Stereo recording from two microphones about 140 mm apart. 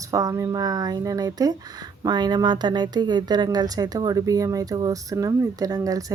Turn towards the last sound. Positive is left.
turn(degrees=-25)  # may be behind; listen again after turning